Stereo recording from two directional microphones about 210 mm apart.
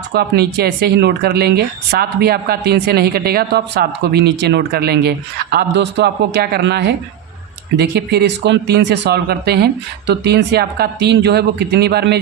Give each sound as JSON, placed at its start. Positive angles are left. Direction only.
{"t": 0.1, "sound": "speech", "side_deg": -50}